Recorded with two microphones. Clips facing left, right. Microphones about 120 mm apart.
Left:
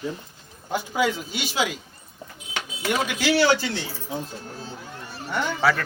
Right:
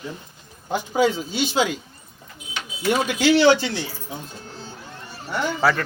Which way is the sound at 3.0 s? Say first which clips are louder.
Right 5 dB; 25° right (ahead or behind).